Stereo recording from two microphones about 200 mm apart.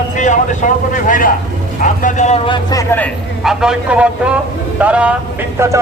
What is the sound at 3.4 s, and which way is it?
A man's voice, 5° right (ahead or behind).